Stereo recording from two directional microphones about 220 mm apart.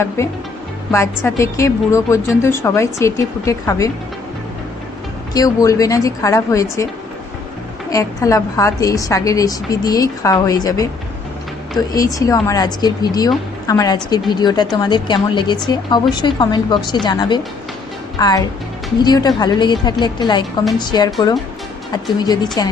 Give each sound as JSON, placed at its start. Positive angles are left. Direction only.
{"t": 0.2, "sound": "a woman's voice", "side_deg": 10}
{"t": 5.3, "sound": "a woman's voice", "side_deg": 15}
{"t": 7.9, "sound": "a woman's voice", "side_deg": 15}
{"t": 11.9, "sound": "a woman's voice", "side_deg": 15}
{"t": 22.6, "sound": "a woman's voice", "side_deg": 15}